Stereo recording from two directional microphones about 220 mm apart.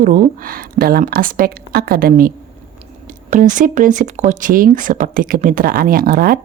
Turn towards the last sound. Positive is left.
turn(degrees=-40)  # may be behind; listen again after turning